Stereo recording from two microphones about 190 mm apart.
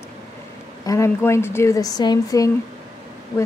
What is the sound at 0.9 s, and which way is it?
A woman's voice, 15° left (ahead or behind).